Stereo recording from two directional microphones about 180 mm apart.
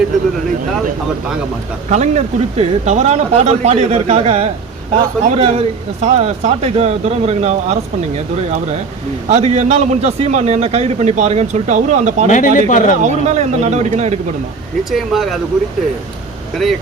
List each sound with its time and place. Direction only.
1.9 s a man's voice: 40° right (ahead or behind)
12.3 s speech: 45° left (ahead or behind)
13.0 s a man's voice: 40° right (ahead or behind)
14.8 s speech: centre (ahead or behind)